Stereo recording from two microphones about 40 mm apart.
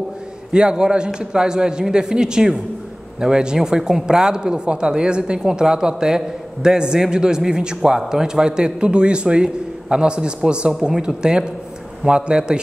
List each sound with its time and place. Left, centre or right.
0.5 s a man's voice: right